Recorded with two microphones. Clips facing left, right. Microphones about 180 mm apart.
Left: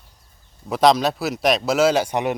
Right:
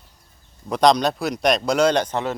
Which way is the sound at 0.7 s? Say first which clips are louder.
Even; 5° left (ahead or behind).